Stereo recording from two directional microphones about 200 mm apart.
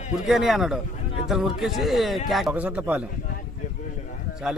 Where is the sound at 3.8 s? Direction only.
40° left (ahead or behind).